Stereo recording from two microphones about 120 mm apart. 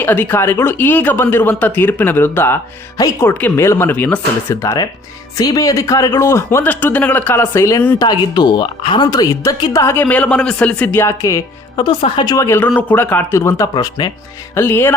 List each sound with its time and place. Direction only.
0.0 s speech: 15° left (ahead or behind)
7.9 s speech: 35° left (ahead or behind)
9.0 s speech: 30° left (ahead or behind)
9.8 s speech: 15° left (ahead or behind)
11.8 s speech: 45° left (ahead or behind)
12.5 s speech: 15° left (ahead or behind)
14.0 s speech: 35° left (ahead or behind)
14.5 s speech: 20° left (ahead or behind)